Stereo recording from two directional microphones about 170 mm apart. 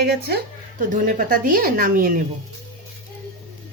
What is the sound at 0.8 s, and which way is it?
Speech, 50° right (ahead or behind).